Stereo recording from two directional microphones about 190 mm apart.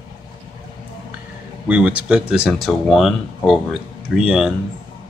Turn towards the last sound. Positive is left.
turn(degrees=-5)  # may be behind; listen again after turning